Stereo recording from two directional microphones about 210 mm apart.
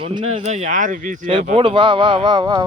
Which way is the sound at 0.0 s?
25° right (ahead or behind).